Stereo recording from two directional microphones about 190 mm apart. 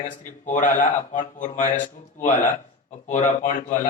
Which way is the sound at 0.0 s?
40° left (ahead or behind).